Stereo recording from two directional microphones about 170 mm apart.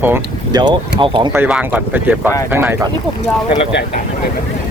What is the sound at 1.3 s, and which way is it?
Speech, 10° right (ahead or behind).